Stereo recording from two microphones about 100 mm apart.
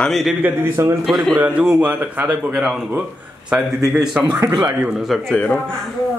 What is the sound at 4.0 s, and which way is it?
A man's voice, 5° right (ahead or behind).